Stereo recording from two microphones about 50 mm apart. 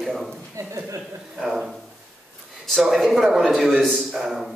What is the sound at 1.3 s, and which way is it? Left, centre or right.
Speech, centre.